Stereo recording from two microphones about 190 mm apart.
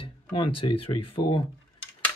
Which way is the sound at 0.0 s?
25° left (ahead or behind).